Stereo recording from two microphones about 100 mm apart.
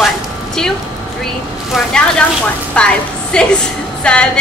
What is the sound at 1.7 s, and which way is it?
A woman's voice, 5° left (ahead or behind).